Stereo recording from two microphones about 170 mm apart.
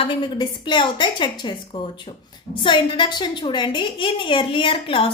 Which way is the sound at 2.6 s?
30° left (ahead or behind).